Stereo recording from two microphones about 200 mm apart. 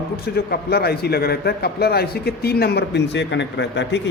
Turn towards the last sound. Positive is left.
turn(degrees=60)  # may be behind; listen again after turning